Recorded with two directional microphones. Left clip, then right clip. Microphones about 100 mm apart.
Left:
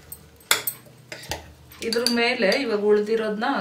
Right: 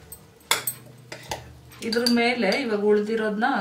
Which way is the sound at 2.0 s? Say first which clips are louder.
Even; 10° left (ahead or behind).